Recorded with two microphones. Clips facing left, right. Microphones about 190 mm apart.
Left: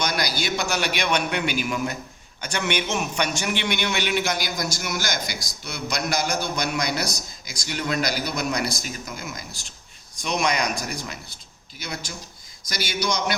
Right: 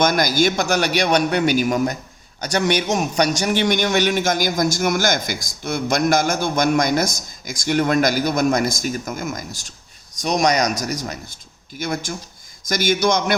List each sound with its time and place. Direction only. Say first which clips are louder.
0.0 s a man's voice: right 9 dB; 45° right (ahead or behind)